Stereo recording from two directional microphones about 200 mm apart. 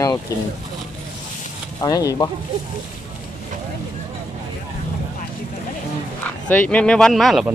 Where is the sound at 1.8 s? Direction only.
20° left (ahead or behind).